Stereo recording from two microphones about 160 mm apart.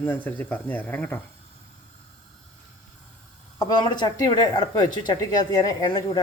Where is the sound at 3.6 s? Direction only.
25° left (ahead or behind).